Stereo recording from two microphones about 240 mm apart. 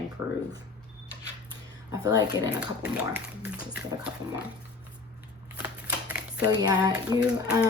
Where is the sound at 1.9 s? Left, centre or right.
Centre.